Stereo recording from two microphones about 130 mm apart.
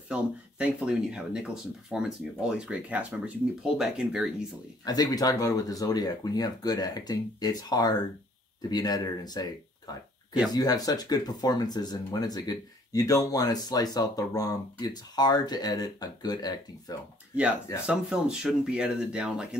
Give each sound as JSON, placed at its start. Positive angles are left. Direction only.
{"t": 0.1, "sound": "speech", "side_deg": -10}
{"t": 4.8, "sound": "speech", "side_deg": 30}
{"t": 10.5, "sound": "speech", "side_deg": 30}
{"t": 17.8, "sound": "speech", "side_deg": -5}